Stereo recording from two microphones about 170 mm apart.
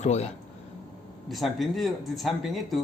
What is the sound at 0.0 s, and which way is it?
Speech, 40° left (ahead or behind).